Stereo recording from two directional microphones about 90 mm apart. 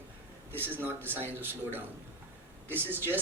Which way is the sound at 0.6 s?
20° right (ahead or behind).